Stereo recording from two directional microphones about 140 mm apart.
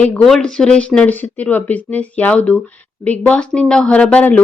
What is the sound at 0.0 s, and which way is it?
Speech, 5° left (ahead or behind).